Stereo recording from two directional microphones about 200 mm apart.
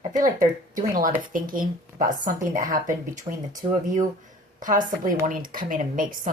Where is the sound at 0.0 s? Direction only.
40° right (ahead or behind).